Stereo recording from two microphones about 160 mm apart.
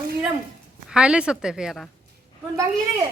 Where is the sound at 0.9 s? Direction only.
5° right (ahead or behind).